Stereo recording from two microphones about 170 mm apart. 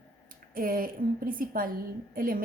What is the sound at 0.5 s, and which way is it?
A woman's voice, 55° right (ahead or behind).